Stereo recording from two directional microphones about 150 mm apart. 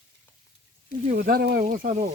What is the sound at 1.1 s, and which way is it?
Speech, 90° right.